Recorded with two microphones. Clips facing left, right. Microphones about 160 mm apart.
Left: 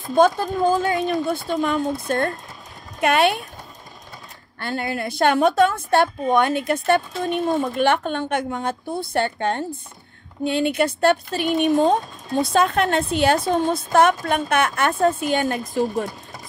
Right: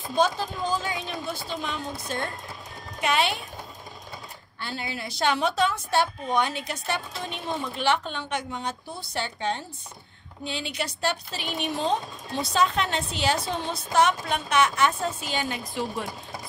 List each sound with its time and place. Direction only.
0.1 s speech: 55° left (ahead or behind)
4.6 s speech: 55° left (ahead or behind)